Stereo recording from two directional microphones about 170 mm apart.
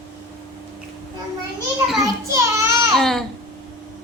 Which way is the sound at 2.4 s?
15° right (ahead or behind).